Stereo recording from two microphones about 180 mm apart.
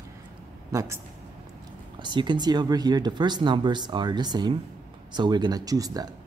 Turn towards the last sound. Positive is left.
turn(degrees=-20)  # may be behind; listen again after turning